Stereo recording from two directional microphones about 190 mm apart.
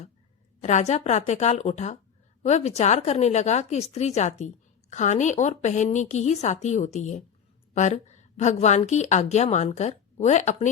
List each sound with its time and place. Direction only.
0.6 s speech: 35° left (ahead or behind)